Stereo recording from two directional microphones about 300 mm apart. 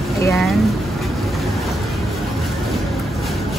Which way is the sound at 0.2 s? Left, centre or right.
Centre.